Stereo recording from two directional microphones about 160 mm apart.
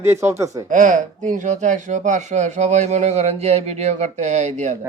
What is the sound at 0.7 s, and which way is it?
Speech, 55° right (ahead or behind).